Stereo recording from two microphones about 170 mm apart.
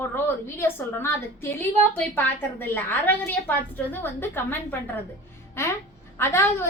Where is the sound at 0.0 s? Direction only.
15° left (ahead or behind).